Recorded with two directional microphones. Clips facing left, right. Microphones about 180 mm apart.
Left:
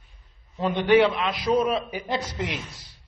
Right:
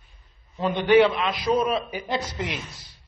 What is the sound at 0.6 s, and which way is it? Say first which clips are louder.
A man's voice: right 1 dB; centre (ahead or behind).